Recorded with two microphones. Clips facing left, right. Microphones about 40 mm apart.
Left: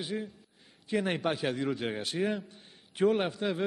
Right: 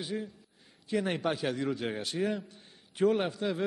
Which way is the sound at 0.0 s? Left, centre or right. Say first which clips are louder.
Left 1 dB; centre.